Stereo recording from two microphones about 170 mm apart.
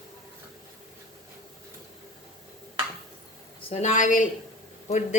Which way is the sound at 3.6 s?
35° left (ahead or behind).